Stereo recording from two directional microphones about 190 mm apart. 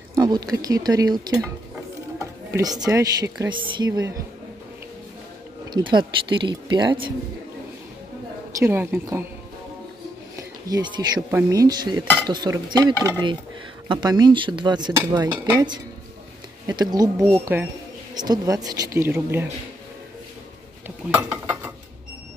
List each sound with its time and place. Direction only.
0.1 s speech: 20° right (ahead or behind)
2.1 s music: 20° right (ahead or behind)
2.9 s speech: 20° right (ahead or behind)
5.7 s speech: 25° right (ahead or behind)
8.5 s speech: 10° right (ahead or behind)
10.7 s speech: 20° right (ahead or behind)
16.6 s speech: 20° right (ahead or behind)
20.8 s cutlery: 10° right (ahead or behind)